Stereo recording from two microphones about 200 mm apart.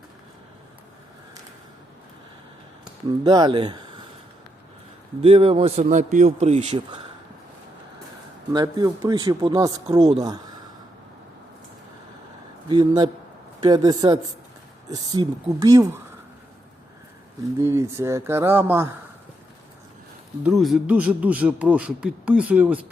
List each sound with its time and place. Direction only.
3.2 s speech: 20° right (ahead or behind)
5.2 s a man's voice: 30° right (ahead or behind)
8.5 s speech: 20° right (ahead or behind)
12.6 s speech: 20° right (ahead or behind)
17.6 s speech: 15° right (ahead or behind)
20.4 s speech: centre (ahead or behind)